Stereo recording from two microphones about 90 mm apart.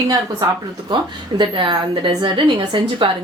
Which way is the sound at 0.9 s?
60° right (ahead or behind).